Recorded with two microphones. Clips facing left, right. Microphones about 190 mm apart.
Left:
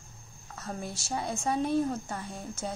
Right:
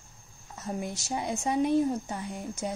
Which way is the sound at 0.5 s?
15° right (ahead or behind).